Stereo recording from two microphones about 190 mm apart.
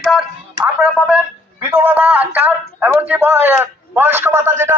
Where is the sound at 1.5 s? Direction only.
10° right (ahead or behind).